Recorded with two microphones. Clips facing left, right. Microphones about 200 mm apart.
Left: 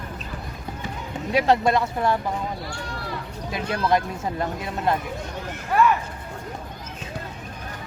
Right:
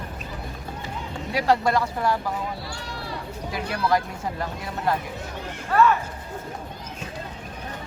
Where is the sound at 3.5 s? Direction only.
20° left (ahead or behind).